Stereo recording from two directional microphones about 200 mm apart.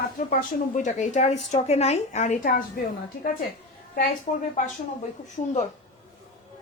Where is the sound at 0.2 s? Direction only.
40° left (ahead or behind).